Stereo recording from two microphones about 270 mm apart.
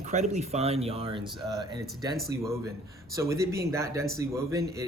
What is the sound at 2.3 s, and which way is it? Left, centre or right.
A man's voice, centre.